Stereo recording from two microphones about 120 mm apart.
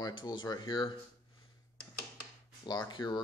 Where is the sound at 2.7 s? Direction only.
35° left (ahead or behind).